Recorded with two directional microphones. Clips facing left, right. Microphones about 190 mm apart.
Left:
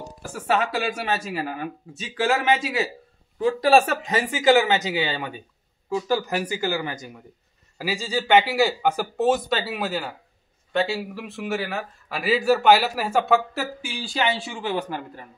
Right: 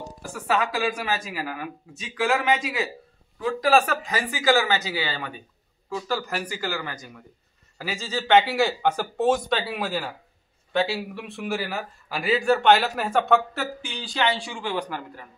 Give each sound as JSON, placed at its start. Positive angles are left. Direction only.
{"t": 0.3, "sound": "a man's voice", "side_deg": 25}
{"t": 14.3, "sound": "speech", "side_deg": 20}